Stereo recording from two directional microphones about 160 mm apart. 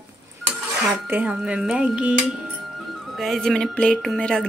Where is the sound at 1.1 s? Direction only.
10° right (ahead or behind).